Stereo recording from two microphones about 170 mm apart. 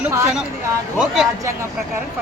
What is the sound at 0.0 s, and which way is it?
Speech, 15° right (ahead or behind).